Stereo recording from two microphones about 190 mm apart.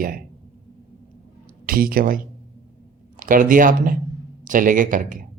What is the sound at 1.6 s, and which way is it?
Speech, 50° right (ahead or behind).